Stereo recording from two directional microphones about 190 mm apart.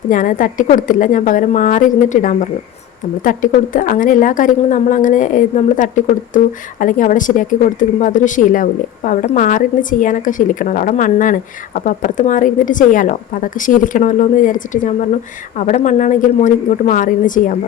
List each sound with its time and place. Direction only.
0.1 s a woman's voice: 45° left (ahead or behind)